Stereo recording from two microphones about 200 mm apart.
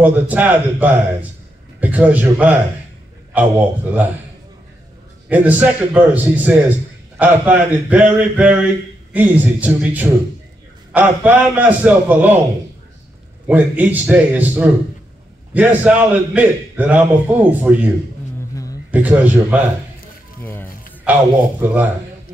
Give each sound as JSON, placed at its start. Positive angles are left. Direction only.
{"t": 0.0, "sound": "a man's voice", "side_deg": -10}
{"t": 5.3, "sound": "a man's voice", "side_deg": -10}
{"t": 13.5, "sound": "a man's voice", "side_deg": -10}
{"t": 18.5, "sound": "a sound", "side_deg": 15}
{"t": 18.9, "sound": "a man's voice", "side_deg": -10}
{"t": 20.4, "sound": "music", "side_deg": 10}
{"t": 21.0, "sound": "a man's voice", "side_deg": -10}